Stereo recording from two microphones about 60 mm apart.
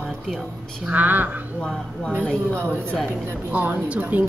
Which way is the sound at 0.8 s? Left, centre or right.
Right.